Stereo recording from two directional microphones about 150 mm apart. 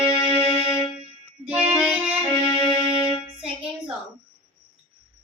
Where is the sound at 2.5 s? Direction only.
30° left (ahead or behind).